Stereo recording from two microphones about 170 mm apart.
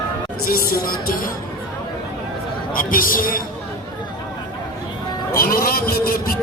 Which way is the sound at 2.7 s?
55° left (ahead or behind).